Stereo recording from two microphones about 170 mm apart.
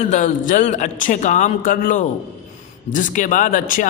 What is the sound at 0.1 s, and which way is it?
A man's voice, 50° left (ahead or behind).